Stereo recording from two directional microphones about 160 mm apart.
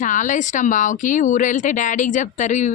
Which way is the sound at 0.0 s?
55° left (ahead or behind).